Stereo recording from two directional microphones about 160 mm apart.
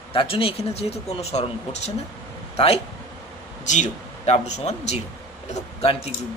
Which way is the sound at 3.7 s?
45° left (ahead or behind).